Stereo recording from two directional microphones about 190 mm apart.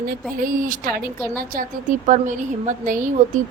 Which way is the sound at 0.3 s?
50° right (ahead or behind).